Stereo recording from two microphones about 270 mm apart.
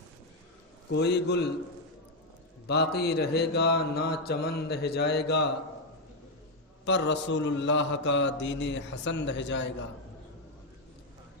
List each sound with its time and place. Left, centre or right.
0.9 s mantra: left
2.6 s mantra: left
6.8 s mantra: left